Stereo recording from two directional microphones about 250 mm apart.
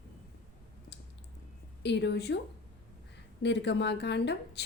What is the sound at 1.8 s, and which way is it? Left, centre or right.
A woman's voice, left.